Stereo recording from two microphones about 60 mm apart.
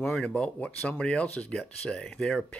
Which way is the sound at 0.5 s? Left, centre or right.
Left.